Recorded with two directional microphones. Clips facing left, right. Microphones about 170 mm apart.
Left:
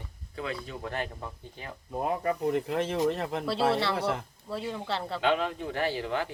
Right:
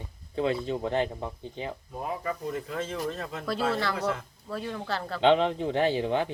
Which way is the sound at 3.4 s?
25° left (ahead or behind).